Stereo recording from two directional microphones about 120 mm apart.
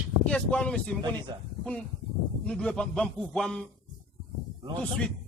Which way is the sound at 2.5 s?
5° left (ahead or behind).